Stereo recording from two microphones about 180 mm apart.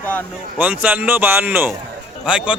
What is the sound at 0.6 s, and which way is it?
A man's voice, 10° right (ahead or behind).